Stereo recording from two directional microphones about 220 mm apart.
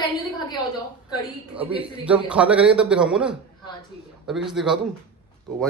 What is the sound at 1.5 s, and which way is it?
A man's voice, 5° right (ahead or behind).